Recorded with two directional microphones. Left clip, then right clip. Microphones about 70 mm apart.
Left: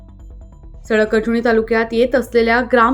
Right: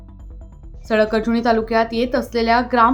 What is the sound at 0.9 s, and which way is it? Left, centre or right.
A woman's voice, centre.